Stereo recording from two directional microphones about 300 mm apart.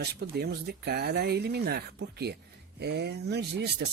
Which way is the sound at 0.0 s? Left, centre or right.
Right.